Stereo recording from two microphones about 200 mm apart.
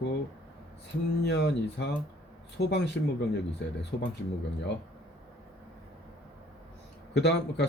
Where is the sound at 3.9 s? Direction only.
50° left (ahead or behind).